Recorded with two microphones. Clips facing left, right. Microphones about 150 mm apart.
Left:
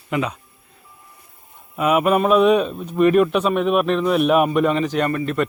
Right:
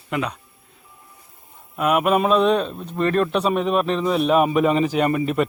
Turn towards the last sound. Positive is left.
turn(degrees=-10)  # may be behind; listen again after turning